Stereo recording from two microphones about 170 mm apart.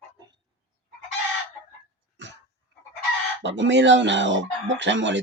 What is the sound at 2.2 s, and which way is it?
Throat clearing, 90° right.